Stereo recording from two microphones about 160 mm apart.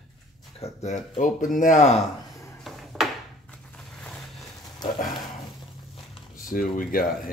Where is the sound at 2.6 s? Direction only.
Centre (ahead or behind).